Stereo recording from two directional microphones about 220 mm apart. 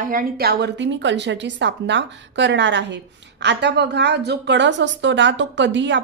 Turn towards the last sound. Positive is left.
turn(degrees=-55)  # may be behind; listen again after turning